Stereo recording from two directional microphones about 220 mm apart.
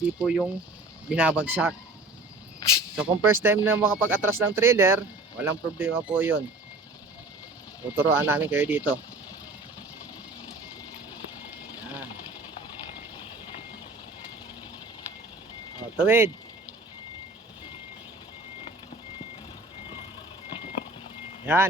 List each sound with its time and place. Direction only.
0.0 s speech: 5° right (ahead or behind)
2.6 s cricket: 15° left (ahead or behind)
2.9 s speech: 5° right (ahead or behind)
7.9 s speech: 10° right (ahead or behind)
11.3 s vehicle: 5° right (ahead or behind)
16.0 s speech: 10° right (ahead or behind)
21.4 s speech: 10° right (ahead or behind)